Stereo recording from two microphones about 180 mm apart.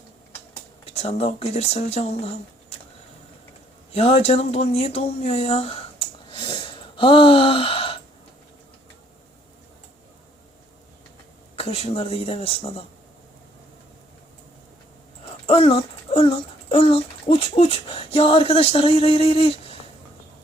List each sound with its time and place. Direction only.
0.9 s speech: 35° left (ahead or behind)
3.9 s speech: 35° left (ahead or behind)
11.5 s speech: 30° left (ahead or behind)
15.4 s speech: 35° left (ahead or behind)